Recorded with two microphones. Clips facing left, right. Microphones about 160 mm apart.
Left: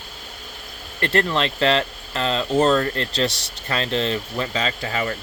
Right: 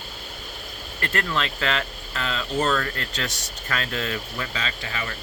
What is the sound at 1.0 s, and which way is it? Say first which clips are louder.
Speech: left 6 dB; 30° left (ahead or behind).